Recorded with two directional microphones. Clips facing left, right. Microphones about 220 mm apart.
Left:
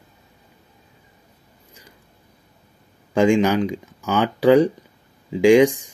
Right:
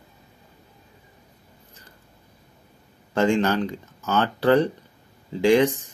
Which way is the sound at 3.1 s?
15° left (ahead or behind).